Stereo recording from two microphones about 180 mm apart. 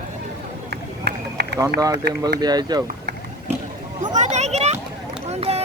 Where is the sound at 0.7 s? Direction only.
65° right (ahead or behind).